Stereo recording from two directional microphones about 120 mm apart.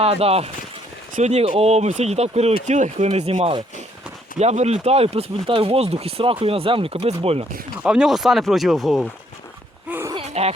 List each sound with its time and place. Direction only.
0.0 s speech: 55° right (ahead or behind)
4.4 s speech: 65° right (ahead or behind)
7.8 s speech: 5° right (ahead or behind)
10.2 s laughter: 60° right (ahead or behind)